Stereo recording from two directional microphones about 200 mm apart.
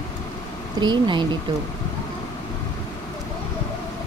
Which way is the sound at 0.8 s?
20° right (ahead or behind).